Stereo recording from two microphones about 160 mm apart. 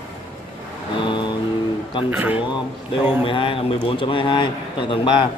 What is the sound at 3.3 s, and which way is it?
A man's voice, 35° left (ahead or behind).